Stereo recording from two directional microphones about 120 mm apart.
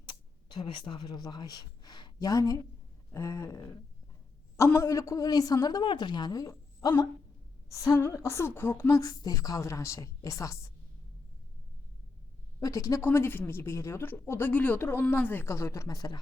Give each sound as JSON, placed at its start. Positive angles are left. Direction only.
{"t": 0.0, "sound": "a woman's voice", "side_deg": 40}
{"t": 12.5, "sound": "speech", "side_deg": 30}